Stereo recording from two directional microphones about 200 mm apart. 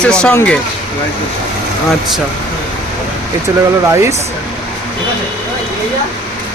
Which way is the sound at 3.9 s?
15° right (ahead or behind).